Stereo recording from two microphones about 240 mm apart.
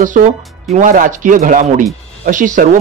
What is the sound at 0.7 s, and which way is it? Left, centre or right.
A man's voice, right.